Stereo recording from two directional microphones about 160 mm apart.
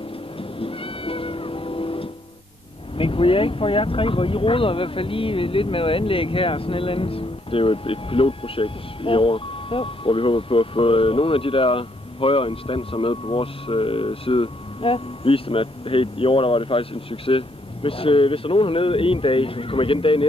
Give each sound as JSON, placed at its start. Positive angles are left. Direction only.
{"t": 0.4, "sound": "cat", "side_deg": 35}
{"t": 3.0, "sound": "speech", "side_deg": 35}